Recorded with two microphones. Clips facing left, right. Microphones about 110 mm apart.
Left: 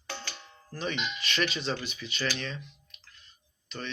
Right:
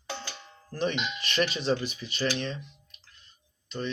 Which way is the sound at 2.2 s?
25° right (ahead or behind).